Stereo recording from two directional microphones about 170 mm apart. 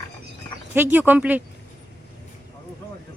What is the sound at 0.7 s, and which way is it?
Speech, 10° right (ahead or behind).